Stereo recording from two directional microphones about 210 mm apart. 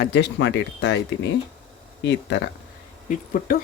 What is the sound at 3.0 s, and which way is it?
Speech, 40° left (ahead or behind).